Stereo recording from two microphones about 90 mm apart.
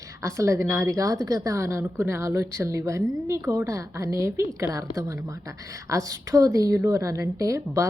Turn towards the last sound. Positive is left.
turn(degrees=-35)  # may be behind; listen again after turning